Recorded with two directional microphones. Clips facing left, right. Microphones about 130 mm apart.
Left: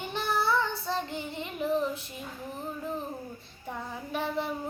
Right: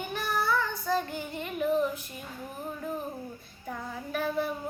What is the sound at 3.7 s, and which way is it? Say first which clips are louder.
Child singing: right 1 dB; 25° left (ahead or behind).